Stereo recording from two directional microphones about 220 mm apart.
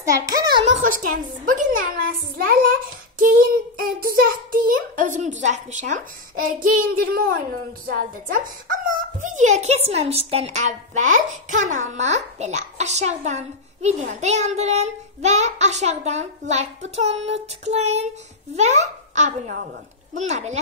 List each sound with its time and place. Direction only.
0.0 s a child's voice: 15° right (ahead or behind)
0.7 s a child's voice: 35° right (ahead or behind)